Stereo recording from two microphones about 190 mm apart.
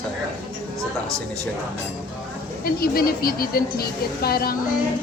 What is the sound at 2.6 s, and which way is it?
A woman's voice, 50° left (ahead or behind).